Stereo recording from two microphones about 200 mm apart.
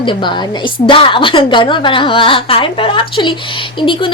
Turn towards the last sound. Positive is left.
turn(degrees=25)  # may be behind; listen again after turning